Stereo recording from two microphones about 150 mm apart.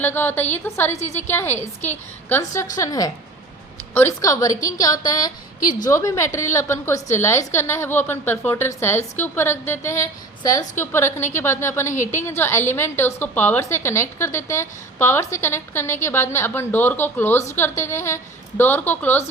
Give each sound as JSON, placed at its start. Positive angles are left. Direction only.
{"t": 0.0, "sound": "a woman's voice", "side_deg": 15}